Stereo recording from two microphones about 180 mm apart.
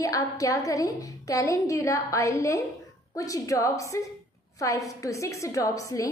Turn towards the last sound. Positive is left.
turn(degrees=20)  # may be behind; listen again after turning